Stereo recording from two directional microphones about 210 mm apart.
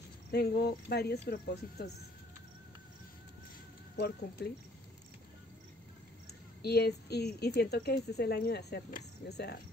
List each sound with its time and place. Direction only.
0.3 s speech: 50° left (ahead or behind)
3.9 s speech: 55° left (ahead or behind)
6.2 s speech: 50° left (ahead or behind)